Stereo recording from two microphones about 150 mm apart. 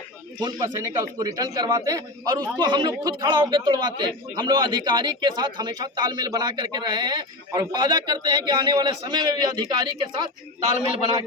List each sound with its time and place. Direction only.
0.4 s a man's voice: 30° right (ahead or behind)